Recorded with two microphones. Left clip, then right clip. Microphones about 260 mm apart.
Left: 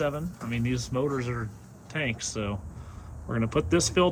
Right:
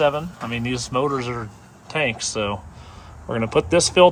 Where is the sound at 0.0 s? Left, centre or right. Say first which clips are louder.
Right 10 dB; centre.